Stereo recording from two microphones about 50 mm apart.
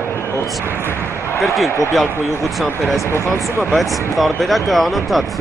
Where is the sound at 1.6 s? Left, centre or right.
Left.